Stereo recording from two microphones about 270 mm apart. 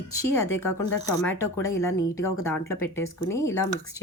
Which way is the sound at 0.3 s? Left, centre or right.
Centre.